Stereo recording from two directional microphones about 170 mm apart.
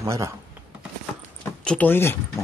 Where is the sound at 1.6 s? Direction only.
5° left (ahead or behind).